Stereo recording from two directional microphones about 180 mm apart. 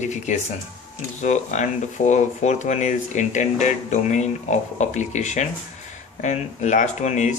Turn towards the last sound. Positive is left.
turn(degrees=40)  # may be behind; listen again after turning